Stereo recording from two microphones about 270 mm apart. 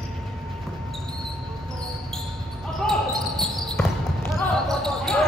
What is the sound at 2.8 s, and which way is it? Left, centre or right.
Basketball bounce, centre.